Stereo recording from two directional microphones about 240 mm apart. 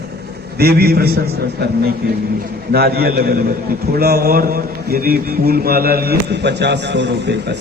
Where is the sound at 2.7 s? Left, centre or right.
Right.